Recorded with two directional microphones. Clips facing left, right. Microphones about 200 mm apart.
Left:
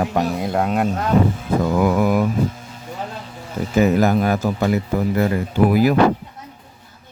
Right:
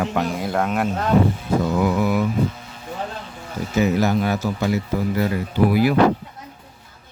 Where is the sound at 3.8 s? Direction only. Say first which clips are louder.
Left 3 dB; 50° left (ahead or behind).